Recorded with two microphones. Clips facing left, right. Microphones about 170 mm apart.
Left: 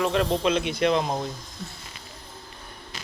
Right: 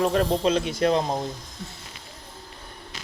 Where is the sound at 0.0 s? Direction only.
40° right (ahead or behind).